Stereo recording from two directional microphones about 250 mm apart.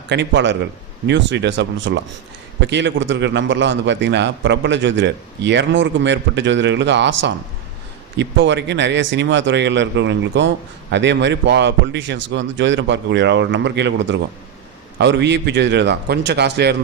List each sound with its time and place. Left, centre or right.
0.1 s a man's voice: right